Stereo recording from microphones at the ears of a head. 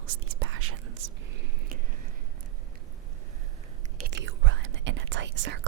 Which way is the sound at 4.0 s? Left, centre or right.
Right.